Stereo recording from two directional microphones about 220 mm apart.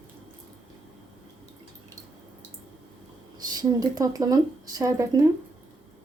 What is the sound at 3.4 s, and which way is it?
Speech, 15° right (ahead or behind).